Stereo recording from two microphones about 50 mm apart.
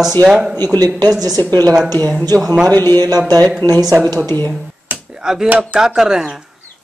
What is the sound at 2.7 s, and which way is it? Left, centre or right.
Speech, left.